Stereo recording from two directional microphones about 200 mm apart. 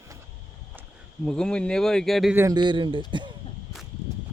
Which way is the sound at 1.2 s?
5° left (ahead or behind).